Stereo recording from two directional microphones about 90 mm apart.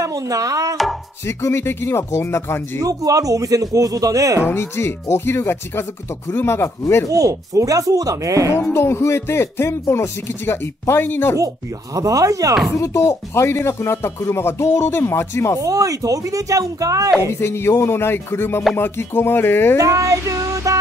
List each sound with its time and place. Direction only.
0.0 s a sound: 40° right (ahead or behind)
1.2 s speech: 30° left (ahead or behind)
2.8 s speech: 40° right (ahead or behind)
4.5 s speech: 30° left (ahead or behind)
7.1 s speech: 40° right (ahead or behind)
8.7 s speech: 30° left (ahead or behind)
11.3 s speech: 40° right (ahead or behind)
12.7 s speech: 35° left (ahead or behind)
15.6 s speech: 40° right (ahead or behind)
17.3 s speech: 30° left (ahead or behind)
19.8 s a sound: 40° right (ahead or behind)